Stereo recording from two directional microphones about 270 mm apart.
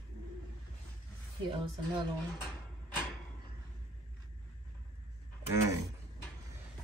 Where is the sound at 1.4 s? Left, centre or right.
Right.